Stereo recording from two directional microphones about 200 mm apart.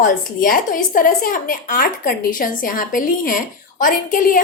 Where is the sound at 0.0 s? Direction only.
45° left (ahead or behind).